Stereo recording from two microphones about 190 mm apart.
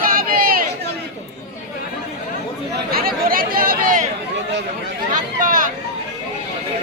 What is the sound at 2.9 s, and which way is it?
Speech, 50° right (ahead or behind).